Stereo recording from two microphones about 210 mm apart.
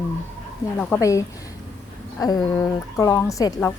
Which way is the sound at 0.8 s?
10° left (ahead or behind).